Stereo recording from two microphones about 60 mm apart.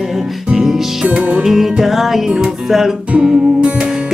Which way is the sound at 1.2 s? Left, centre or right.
Right.